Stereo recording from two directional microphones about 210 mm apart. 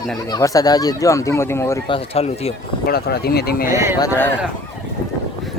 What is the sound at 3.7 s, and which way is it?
Speech, 10° right (ahead or behind).